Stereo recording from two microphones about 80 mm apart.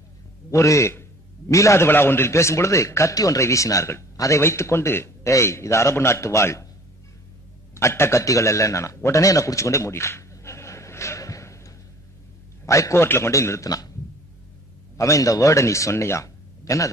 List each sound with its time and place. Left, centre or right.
0.5 s speech: left
1.9 s speech: left
7.7 s a man's voice: left
15.0 s speech: left